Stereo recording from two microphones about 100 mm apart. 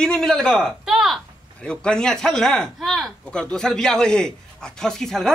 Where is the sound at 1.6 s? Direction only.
10° left (ahead or behind).